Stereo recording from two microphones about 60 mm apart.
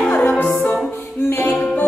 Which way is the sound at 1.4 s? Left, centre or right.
Centre.